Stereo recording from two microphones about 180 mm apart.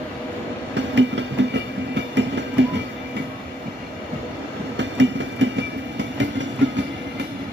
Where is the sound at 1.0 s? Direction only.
80° right.